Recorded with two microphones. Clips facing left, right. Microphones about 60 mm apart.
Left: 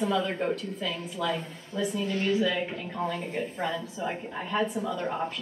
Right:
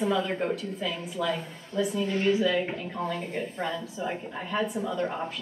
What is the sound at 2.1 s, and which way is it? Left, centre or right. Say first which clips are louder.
Speech: right 3 dB; centre.